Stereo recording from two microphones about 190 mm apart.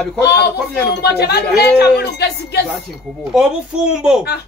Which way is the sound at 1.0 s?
55° left (ahead or behind).